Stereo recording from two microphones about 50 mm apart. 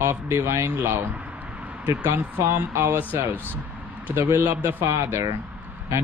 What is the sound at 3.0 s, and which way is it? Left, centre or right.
Speech, right.